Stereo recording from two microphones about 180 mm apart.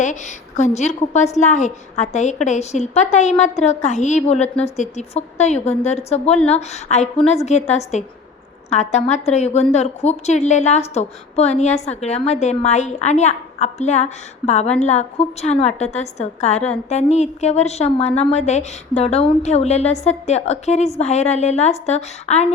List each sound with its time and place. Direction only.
0.0 s a woman's voice: 40° left (ahead or behind)